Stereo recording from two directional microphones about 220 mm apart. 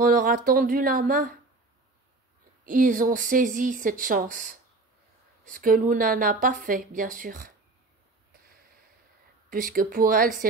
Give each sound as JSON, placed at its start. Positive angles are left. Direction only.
{"t": 0.0, "sound": "speech", "side_deg": -40}
{"t": 2.6, "sound": "speech", "side_deg": -40}
{"t": 9.5, "sound": "speech", "side_deg": -40}